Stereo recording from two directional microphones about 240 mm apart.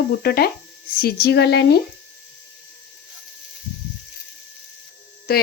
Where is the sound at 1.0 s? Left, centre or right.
Left.